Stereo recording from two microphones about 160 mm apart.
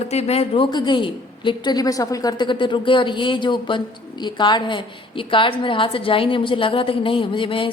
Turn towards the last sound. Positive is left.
turn(degrees=35)  # may be behind; listen again after turning